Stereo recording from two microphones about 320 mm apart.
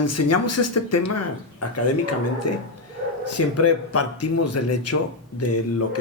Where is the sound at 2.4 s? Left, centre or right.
Left.